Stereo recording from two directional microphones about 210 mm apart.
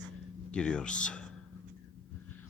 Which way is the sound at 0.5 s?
5° left (ahead or behind).